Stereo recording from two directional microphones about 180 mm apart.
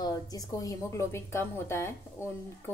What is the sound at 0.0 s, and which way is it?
A woman's voice, 20° left (ahead or behind).